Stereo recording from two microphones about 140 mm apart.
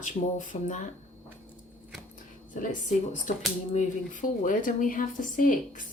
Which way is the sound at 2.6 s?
65° left (ahead or behind).